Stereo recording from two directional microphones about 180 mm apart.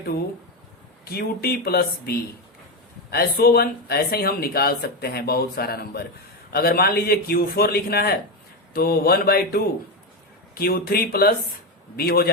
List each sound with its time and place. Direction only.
1.1 s speech: 60° left (ahead or behind)